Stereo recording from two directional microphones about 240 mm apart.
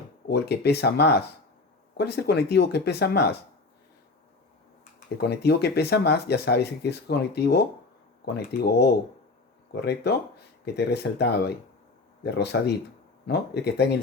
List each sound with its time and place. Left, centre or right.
0.3 s speech: left
5.1 s speech: left